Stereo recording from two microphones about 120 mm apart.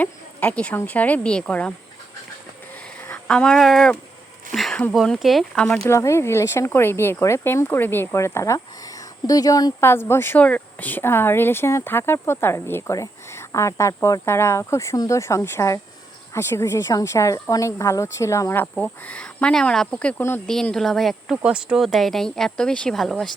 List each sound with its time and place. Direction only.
0.0 s speech: 10° left (ahead or behind)
3.1 s speech: 10° left (ahead or behind)
5.9 s speech: 25° left (ahead or behind)
9.8 s speech: 20° left (ahead or behind); by 23.3 s 5° left (ahead or behind)